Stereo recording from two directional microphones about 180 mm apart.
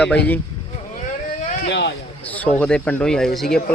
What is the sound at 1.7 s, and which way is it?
Speech, 75° left (ahead or behind).